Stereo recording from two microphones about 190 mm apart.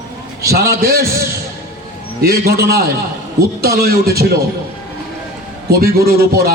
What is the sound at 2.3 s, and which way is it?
A man's voice, 55° right (ahead or behind).